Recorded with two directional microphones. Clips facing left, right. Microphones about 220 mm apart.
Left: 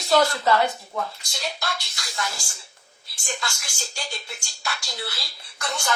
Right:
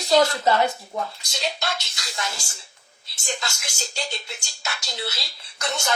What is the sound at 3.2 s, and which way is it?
Speech, 20° right (ahead or behind).